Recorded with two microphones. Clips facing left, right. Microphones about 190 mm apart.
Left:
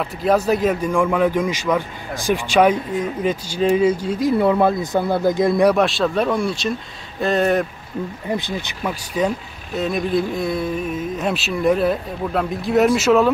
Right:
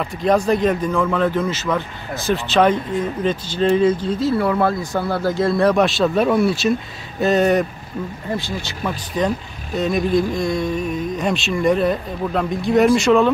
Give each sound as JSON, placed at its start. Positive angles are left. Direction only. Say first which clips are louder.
{"t": 0.0, "sound": "a man's voice", "louder": "even", "side_deg": 5}
{"t": 5.8, "sound": "speech", "louder": "right 2 dB", "side_deg": 0}
{"t": 8.3, "sound": "a man's voice", "louder": "left 1 dB", "side_deg": 20}